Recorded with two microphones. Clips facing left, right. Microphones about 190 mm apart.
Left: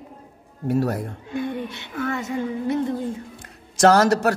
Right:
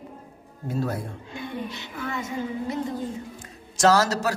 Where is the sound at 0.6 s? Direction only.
70° left (ahead or behind).